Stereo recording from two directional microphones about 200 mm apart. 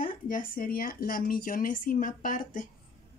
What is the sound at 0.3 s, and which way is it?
A woman's voice, 45° left (ahead or behind).